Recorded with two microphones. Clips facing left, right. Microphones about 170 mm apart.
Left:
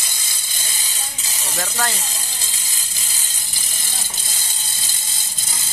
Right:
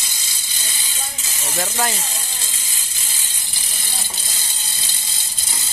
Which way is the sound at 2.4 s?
40° left (ahead or behind).